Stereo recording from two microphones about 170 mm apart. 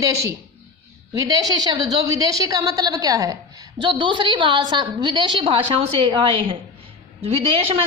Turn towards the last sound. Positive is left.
turn(degrees=-35)  # may be behind; listen again after turning